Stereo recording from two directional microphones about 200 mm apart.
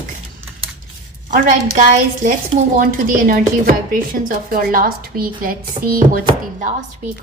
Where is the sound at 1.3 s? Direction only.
40° right (ahead or behind).